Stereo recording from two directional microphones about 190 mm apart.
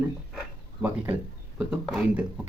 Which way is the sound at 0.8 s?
10° right (ahead or behind).